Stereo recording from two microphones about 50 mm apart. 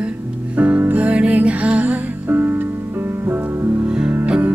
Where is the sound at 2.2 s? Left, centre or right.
Right.